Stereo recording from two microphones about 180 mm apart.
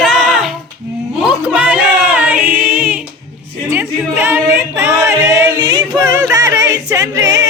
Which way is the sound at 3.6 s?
15° right (ahead or behind).